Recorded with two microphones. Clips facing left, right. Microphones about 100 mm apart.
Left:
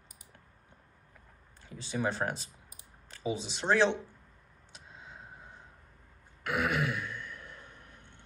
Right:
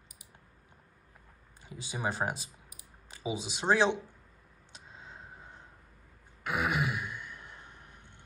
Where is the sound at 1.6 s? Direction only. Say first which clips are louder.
Left 2 dB; 10° right (ahead or behind).